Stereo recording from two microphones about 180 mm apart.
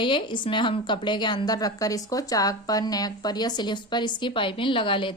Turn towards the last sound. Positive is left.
turn(degrees=30)  # may be behind; listen again after turning